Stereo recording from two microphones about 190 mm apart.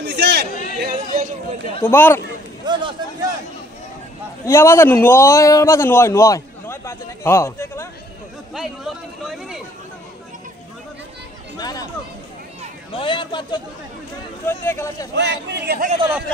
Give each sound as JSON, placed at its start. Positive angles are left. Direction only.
{"t": 0.0, "sound": "chatter", "side_deg": -60}
{"t": 0.7, "sound": "chatter", "side_deg": -50}
{"t": 1.9, "sound": "a man's voice", "side_deg": 10}
{"t": 2.6, "sound": "a sound", "side_deg": -25}
{"t": 4.5, "sound": "a man's voice", "side_deg": 15}
{"t": 8.5, "sound": "a sound", "side_deg": 0}
{"t": 11.5, "sound": "chatter", "side_deg": 20}
{"t": 12.9, "sound": "speech", "side_deg": 25}
{"t": 14.5, "sound": "a man's voice", "side_deg": 15}
{"t": 15.1, "sound": "speech", "side_deg": -65}